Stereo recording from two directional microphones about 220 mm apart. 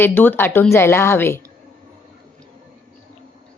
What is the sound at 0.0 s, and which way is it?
Speech, 10° left (ahead or behind).